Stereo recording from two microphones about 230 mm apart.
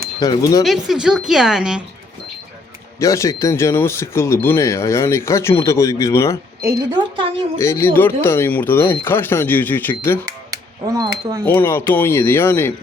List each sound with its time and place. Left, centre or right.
0.2 s speech: centre
0.9 s speech: centre
3.0 s speech: centre
6.7 s a woman's voice: right
7.6 s speech: centre
10.5 s speech: centre
11.4 s speech: centre